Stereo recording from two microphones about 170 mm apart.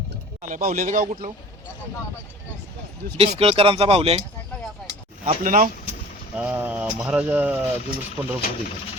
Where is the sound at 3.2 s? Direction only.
35° right (ahead or behind).